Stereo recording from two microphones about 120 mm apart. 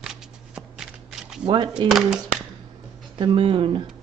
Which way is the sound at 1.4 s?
40° right (ahead or behind).